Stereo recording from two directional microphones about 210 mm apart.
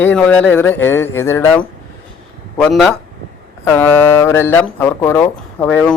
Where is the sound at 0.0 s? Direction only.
10° left (ahead or behind).